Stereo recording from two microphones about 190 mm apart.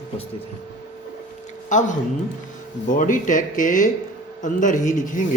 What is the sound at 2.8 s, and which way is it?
A man's voice, 45° left (ahead or behind).